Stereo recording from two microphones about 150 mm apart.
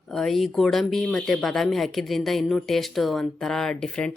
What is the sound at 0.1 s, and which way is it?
Speech, centre (ahead or behind).